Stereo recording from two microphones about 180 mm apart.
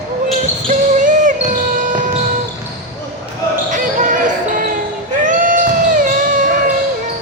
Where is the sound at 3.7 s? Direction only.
45° right (ahead or behind).